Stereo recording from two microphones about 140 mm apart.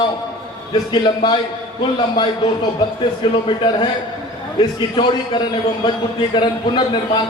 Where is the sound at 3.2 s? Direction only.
35° left (ahead or behind).